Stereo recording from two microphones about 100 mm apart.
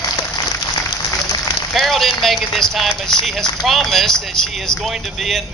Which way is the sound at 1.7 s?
Centre (ahead or behind).